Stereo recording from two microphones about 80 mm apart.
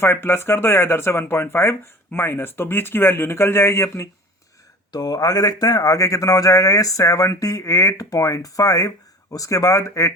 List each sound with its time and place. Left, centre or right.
0.0 s speech: left
4.9 s speech: left